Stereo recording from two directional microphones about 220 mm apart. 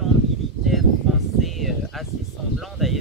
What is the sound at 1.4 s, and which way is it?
Speech, centre (ahead or behind).